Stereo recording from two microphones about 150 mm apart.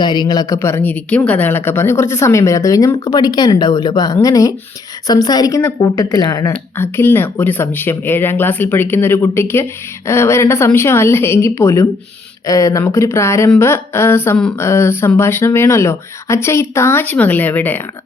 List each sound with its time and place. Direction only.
0.0 s a woman's voice: 30° left (ahead or behind); by 17.8 s 10° left (ahead or behind)